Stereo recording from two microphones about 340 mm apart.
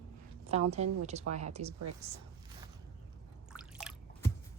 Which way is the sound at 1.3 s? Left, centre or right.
Centre.